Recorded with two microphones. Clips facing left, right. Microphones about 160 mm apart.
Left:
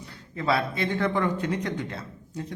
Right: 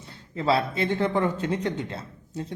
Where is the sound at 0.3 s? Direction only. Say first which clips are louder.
Right 2 dB; 25° right (ahead or behind).